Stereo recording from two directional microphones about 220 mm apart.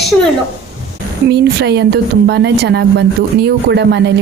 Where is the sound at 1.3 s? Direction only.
50° right (ahead or behind).